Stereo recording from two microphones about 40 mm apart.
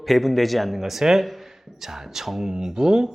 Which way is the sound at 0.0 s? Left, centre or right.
Centre.